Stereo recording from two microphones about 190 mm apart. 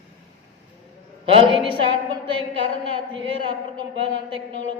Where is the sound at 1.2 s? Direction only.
25° right (ahead or behind).